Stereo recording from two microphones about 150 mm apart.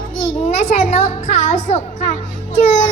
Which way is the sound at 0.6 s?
50° left (ahead or behind).